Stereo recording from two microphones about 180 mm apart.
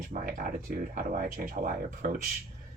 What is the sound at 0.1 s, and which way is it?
Speech, 50° right (ahead or behind).